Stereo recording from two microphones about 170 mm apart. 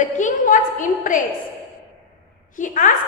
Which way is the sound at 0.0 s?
45° left (ahead or behind).